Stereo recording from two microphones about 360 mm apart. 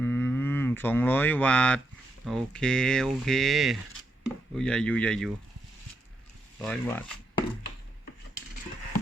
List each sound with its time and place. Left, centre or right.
0.0 s a sound: centre
2.2 s speech: centre
6.6 s speech: centre